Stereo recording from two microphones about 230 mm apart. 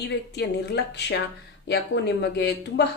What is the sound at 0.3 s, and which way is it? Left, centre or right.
Speech, left.